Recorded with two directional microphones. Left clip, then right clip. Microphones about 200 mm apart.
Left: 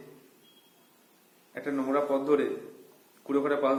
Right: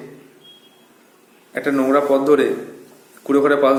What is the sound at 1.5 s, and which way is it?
Speech, 10° right (ahead or behind).